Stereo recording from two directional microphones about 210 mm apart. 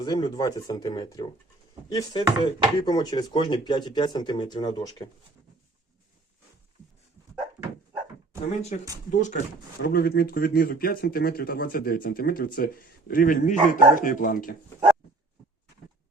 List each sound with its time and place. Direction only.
0.0 s speech: 20° left (ahead or behind)
9.1 s speech: 35° left (ahead or behind)
9.8 s speech: 45° left (ahead or behind)